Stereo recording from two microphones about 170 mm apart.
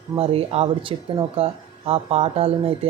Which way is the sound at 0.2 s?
35° right (ahead or behind).